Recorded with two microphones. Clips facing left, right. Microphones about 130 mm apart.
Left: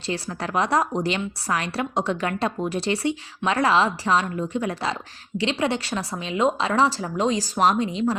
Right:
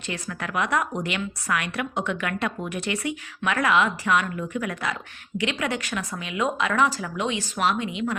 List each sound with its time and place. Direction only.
0.0 s a woman's voice: 30° left (ahead or behind)